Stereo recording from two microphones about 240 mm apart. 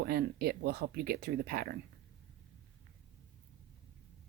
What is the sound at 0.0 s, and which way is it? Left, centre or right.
Speech, right.